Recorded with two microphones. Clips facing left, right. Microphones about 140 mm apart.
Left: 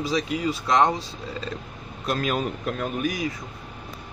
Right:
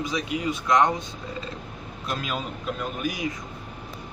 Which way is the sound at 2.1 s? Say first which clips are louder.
Left 5 dB; 50° left (ahead or behind).